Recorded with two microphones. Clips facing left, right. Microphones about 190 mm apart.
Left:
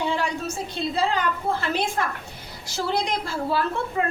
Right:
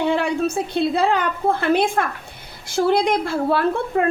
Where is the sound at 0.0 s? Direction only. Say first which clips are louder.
Right 7 dB; 60° right (ahead or behind).